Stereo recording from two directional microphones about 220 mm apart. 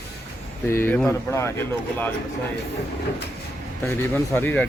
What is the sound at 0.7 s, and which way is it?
Speech, 10° left (ahead or behind).